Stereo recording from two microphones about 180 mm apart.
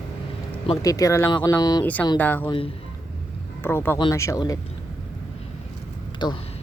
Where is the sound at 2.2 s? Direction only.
10° left (ahead or behind).